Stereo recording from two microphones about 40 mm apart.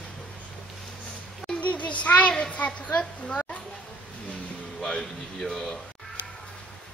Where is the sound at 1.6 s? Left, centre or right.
Left.